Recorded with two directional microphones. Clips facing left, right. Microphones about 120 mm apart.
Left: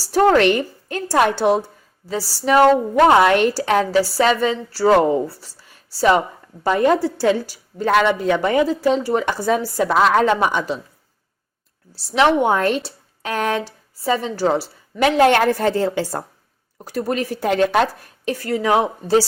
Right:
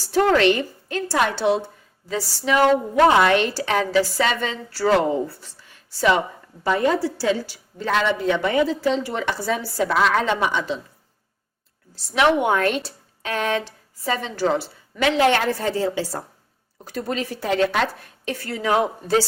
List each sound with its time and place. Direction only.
0.1 s a woman's voice: 45° left (ahead or behind)
2.0 s a woman's voice: 35° left (ahead or behind)
6.7 s a woman's voice: 50° left (ahead or behind)
12.1 s a woman's voice: 30° left (ahead or behind); by 16.2 s 55° left (ahead or behind)
16.7 s a woman's voice: 40° left (ahead or behind)
18.7 s speech: 30° left (ahead or behind)